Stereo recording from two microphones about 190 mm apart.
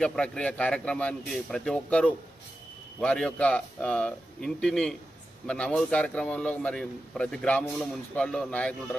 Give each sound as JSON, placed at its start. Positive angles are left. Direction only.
{"t": 0.0, "sound": "a man's voice", "side_deg": 5}